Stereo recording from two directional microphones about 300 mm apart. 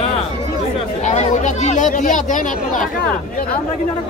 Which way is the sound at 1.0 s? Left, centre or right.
Left.